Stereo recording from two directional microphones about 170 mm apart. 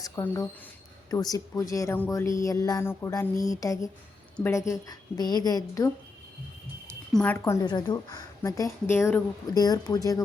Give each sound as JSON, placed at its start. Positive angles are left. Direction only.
{"t": 0.0, "sound": "a woman's voice", "side_deg": 20}
{"t": 7.1, "sound": "a woman's voice", "side_deg": 5}
{"t": 7.3, "sound": "a woman's voice", "side_deg": 15}